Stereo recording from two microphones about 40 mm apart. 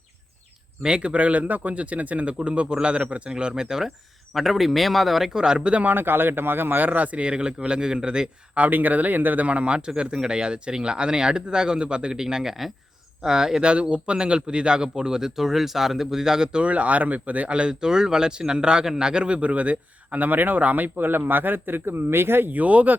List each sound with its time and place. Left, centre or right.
0.8 s a man's voice: right
4.4 s speech: centre
5.3 s speech: centre
5.8 s a man's voice: right
8.5 s a man's voice: right
9.5 s a man's voice: right; by 16.6 s centre
16.6 s a man's voice: right
22.5 s a man's voice: right